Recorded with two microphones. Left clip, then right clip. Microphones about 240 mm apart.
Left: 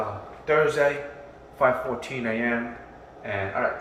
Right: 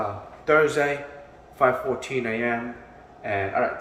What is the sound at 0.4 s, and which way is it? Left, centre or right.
Speech, centre.